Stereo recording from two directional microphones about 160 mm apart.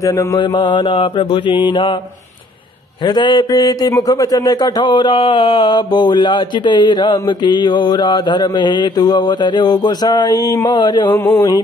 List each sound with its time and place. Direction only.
0.0 s a man's voice: 20° left (ahead or behind)
0.4 s mantra: 30° left (ahead or behind)
3.1 s a man's voice: 30° left (ahead or behind)